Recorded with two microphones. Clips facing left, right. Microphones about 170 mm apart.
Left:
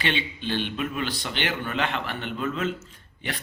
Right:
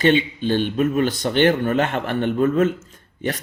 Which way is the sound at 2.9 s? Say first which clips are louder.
Right 9 dB; 45° right (ahead or behind).